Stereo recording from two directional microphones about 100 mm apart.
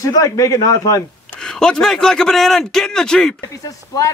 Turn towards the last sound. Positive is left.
turn(degrees=35)  # may be behind; listen again after turning